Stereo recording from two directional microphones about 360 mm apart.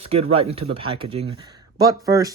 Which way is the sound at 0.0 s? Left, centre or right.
Centre.